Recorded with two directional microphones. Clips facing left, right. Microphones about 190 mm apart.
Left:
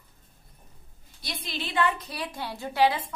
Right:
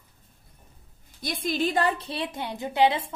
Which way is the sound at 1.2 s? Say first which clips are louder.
Right 9 dB; 50° right (ahead or behind).